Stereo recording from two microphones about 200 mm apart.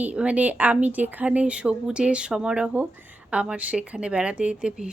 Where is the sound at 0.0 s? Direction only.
5° right (ahead or behind).